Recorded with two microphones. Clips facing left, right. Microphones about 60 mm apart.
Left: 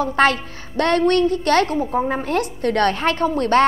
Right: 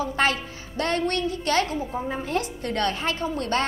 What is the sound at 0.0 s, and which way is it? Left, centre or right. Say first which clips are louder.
A woman's voice: left 7 dB; left.